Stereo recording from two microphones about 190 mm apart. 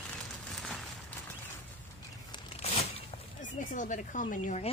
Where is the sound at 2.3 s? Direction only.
35° left (ahead or behind).